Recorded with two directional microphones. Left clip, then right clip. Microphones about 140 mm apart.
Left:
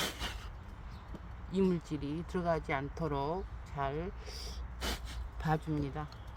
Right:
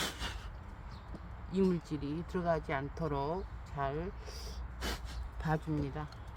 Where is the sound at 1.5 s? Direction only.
15° left (ahead or behind).